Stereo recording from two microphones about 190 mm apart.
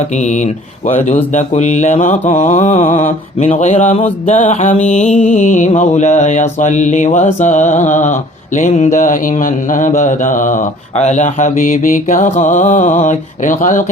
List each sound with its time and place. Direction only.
0.2 s speech: 40° left (ahead or behind)